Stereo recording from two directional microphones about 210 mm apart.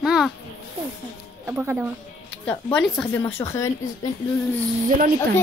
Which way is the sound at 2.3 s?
5° left (ahead or behind).